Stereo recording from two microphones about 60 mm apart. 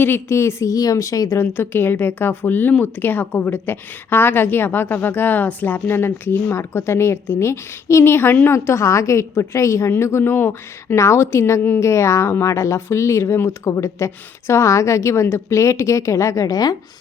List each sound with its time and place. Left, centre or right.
0.0 s a woman's voice: left
0.3 s speech: left
1.4 s a woman's voice: left
8.5 s speech: left
10.0 s a woman's voice: left
10.9 s a woman's voice: left